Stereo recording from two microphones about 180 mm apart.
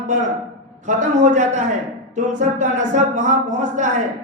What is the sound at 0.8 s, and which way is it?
A man's voice, 45° right (ahead or behind).